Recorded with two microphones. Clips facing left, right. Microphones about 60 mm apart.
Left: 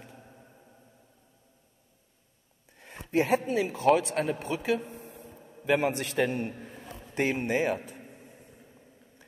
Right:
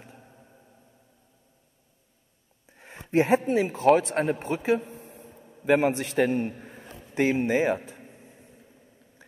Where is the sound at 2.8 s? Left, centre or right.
Right.